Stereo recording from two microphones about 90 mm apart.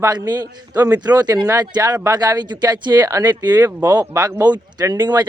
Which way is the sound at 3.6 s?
25° right (ahead or behind).